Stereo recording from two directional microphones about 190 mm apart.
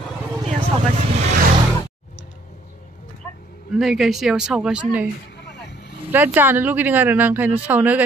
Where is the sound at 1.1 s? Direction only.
35° right (ahead or behind).